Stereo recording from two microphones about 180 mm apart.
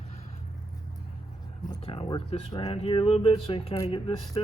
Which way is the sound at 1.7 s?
25° left (ahead or behind).